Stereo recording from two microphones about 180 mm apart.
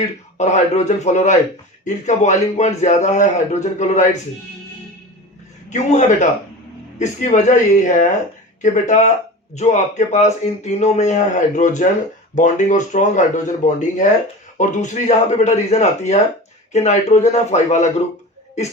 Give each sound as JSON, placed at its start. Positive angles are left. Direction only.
{"t": 0.3, "sound": "speech", "side_deg": 40}
{"t": 5.7, "sound": "speech", "side_deg": 40}